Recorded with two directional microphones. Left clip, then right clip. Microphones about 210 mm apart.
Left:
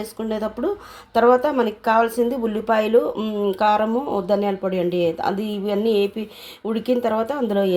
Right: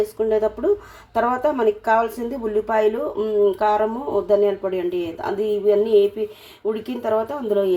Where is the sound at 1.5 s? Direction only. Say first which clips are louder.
Even; 50° left (ahead or behind).